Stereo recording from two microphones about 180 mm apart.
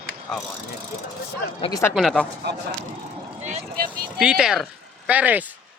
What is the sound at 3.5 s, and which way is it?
Speech, 50° right (ahead or behind).